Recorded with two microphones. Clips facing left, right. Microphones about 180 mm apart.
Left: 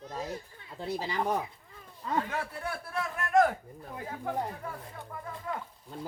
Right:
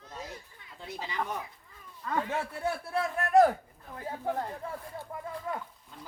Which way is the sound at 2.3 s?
25° right (ahead or behind).